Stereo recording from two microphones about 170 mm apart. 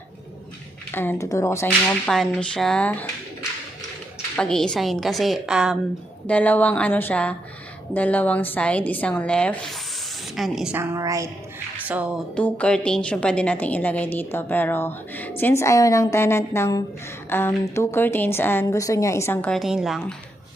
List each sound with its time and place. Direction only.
0.9 s a woman's voice: 10° left (ahead or behind)
2.0 s a woman's voice: centre (ahead or behind)
4.4 s a woman's voice: 5° left (ahead or behind)
6.2 s a woman's voice: 10° left (ahead or behind)
10.8 s a woman's voice: 20° right (ahead or behind)
11.9 s music: 10° right (ahead or behind)
12.4 s a woman's voice: 10° left (ahead or behind)